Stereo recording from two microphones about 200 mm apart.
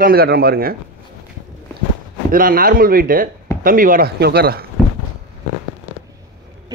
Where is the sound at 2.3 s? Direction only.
45° right (ahead or behind).